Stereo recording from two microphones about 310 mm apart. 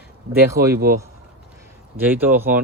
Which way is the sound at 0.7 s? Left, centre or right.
Right.